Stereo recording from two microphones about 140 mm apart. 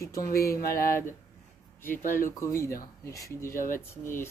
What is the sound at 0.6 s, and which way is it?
Speech, 90° left.